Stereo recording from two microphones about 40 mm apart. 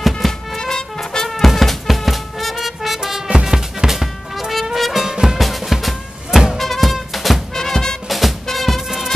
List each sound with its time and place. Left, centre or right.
0.0 s music: centre
0.6 s music: centre
1.4 s music: centre
5.0 s music: centre
7.5 s music: centre
8.1 s music: centre